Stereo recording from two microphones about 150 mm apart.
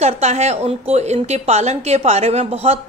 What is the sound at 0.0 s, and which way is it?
A woman's voice, 45° right (ahead or behind).